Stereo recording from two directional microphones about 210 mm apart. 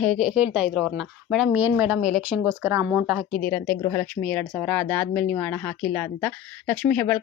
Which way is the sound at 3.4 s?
10° left (ahead or behind).